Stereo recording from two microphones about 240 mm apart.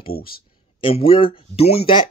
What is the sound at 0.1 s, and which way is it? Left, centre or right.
Speech, left.